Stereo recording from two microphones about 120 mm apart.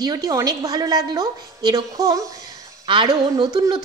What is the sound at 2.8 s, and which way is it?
Speech, 40° right (ahead or behind).